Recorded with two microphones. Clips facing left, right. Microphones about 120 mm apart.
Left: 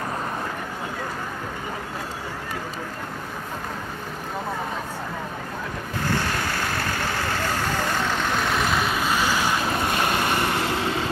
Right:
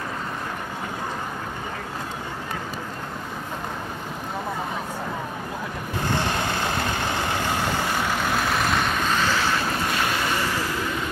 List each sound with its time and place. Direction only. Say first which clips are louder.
6.0 s vehicle: right 1 dB; 20° right (ahead or behind); by 9.6 s 15° left (ahead or behind)
10.2 s vehicle: left 2 dB; 55° left (ahead or behind); by 11.1 s 80° left